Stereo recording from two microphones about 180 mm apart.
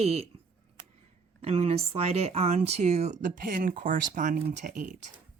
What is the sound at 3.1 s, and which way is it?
Speech, 50° right (ahead or behind).